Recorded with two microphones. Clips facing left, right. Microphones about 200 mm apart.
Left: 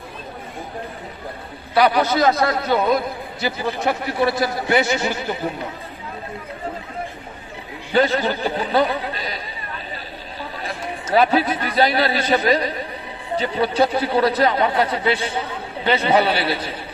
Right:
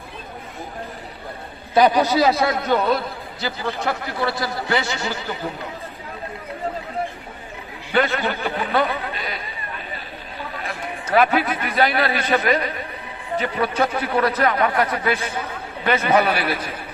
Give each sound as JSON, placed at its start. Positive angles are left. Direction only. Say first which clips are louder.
{"t": 1.7, "sound": "a man's voice", "louder": "right 1 dB", "side_deg": -20}
{"t": 2.3, "sound": "a man's voice", "louder": "even", "side_deg": 0}
{"t": 7.9, "sound": "a man's voice", "louder": "left 3 dB", "side_deg": 35}
{"t": 11.1, "sound": "speech", "louder": "left 1 dB", "side_deg": 35}